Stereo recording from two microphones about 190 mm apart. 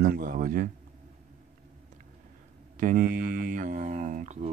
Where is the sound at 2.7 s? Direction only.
45° right (ahead or behind).